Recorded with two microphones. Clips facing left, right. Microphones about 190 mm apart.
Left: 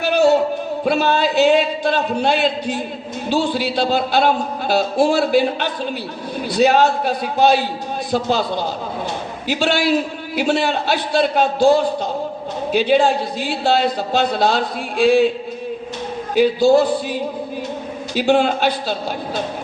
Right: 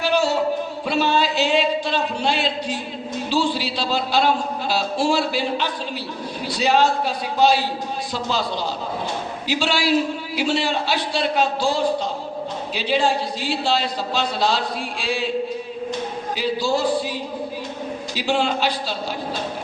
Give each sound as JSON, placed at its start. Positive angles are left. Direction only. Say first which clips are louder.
{"t": 0.0, "sound": "a sound", "louder": "left 6 dB", "side_deg": 55}
{"t": 0.9, "sound": "a man's voice", "louder": "left 3 dB", "side_deg": 50}
{"t": 9.5, "sound": "a man's voice", "louder": "left 3 dB", "side_deg": 55}
{"t": 16.3, "sound": "a man's voice", "louder": "left 10 dB", "side_deg": 55}